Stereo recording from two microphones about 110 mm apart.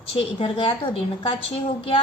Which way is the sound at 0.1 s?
55° left (ahead or behind).